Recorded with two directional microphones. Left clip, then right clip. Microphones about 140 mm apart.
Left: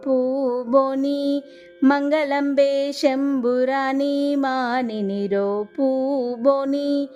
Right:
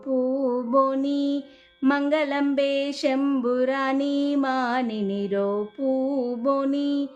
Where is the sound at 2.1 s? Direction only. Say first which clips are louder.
Left 3 dB; 55° left (ahead or behind).